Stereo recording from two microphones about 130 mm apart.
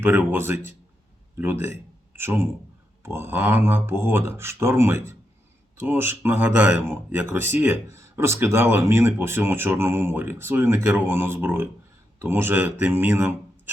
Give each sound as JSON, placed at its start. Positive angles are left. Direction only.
{"t": 0.0, "sound": "speech", "side_deg": -15}
{"t": 2.1, "sound": "speech", "side_deg": -15}